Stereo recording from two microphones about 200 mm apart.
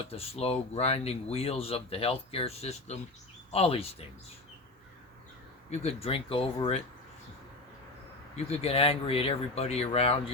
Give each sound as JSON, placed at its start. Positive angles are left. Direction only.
{"t": 0.1, "sound": "speech", "side_deg": 30}
{"t": 5.8, "sound": "speech", "side_deg": 30}
{"t": 8.4, "sound": "speech", "side_deg": 30}